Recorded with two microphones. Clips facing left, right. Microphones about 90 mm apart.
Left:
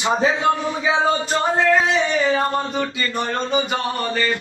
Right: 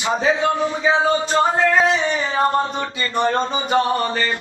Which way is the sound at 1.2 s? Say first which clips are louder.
Right 2 dB; 35° right (ahead or behind).